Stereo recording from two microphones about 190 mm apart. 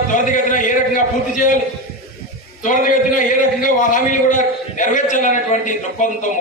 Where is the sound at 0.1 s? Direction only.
40° left (ahead or behind).